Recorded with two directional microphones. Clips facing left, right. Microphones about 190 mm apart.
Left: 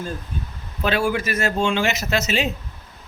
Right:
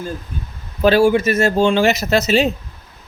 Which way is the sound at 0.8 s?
35° right (ahead or behind).